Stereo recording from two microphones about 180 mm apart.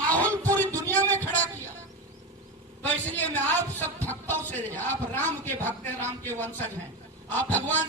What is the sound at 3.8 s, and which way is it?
A man's voice, 10° left (ahead or behind).